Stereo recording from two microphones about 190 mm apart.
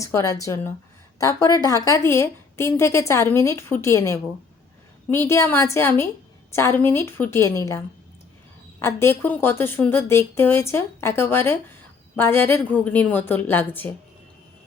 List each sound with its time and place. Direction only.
0.0 s a woman's voice: 15° left (ahead or behind)